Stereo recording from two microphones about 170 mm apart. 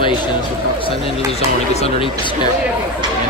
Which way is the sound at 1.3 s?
40° left (ahead or behind).